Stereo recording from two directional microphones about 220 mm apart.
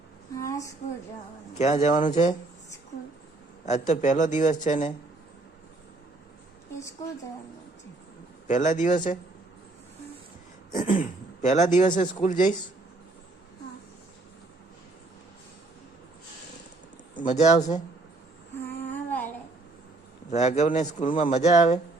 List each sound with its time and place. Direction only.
0.3 s speech: 15° left (ahead or behind)
1.5 s speech: 30° left (ahead or behind)
3.7 s speech: 35° left (ahead or behind)
8.4 s speech: 35° left (ahead or behind)
10.7 s speech: 35° left (ahead or behind)
17.2 s speech: 30° left (ahead or behind)
18.5 s child singing: 10° left (ahead or behind)
20.3 s speech: 30° left (ahead or behind)